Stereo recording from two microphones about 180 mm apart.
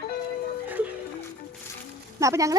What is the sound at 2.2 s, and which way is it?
Speech, 15° right (ahead or behind).